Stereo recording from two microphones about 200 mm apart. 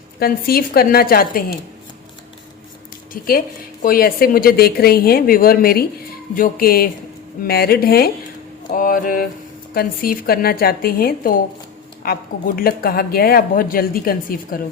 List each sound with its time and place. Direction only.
0.2 s speech: 50° left (ahead or behind)
3.1 s speech: 45° left (ahead or behind)